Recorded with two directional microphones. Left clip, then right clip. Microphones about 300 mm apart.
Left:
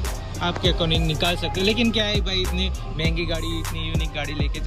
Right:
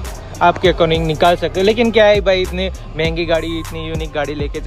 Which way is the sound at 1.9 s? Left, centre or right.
Centre.